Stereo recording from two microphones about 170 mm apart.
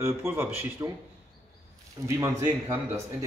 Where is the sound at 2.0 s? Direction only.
15° right (ahead or behind).